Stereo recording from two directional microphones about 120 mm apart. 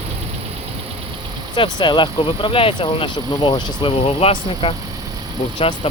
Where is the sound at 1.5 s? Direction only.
40° left (ahead or behind).